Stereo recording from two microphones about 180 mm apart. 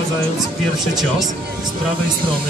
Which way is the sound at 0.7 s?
Centre (ahead or behind).